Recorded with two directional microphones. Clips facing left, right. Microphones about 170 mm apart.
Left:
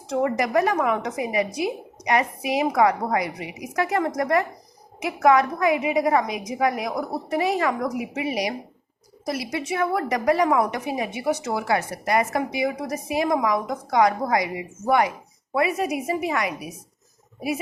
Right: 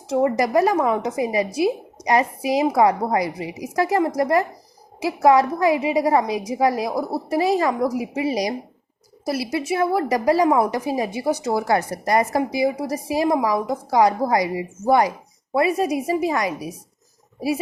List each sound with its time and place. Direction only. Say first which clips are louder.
0.1 s a woman's voice: right 3 dB; 30° right (ahead or behind)